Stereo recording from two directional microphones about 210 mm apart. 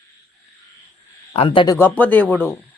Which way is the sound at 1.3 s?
25° left (ahead or behind).